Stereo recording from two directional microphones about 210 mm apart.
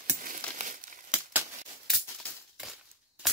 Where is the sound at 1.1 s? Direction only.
10° right (ahead or behind).